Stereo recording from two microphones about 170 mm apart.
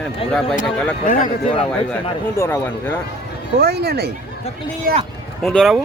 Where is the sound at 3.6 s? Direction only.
70° right (ahead or behind).